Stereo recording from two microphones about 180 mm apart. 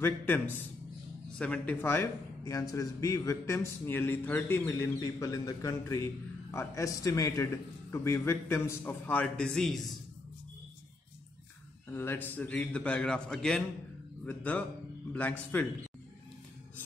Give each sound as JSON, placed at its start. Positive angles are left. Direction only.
{"t": 0.0, "sound": "speech", "side_deg": 10}
{"t": 11.9, "sound": "speech", "side_deg": 10}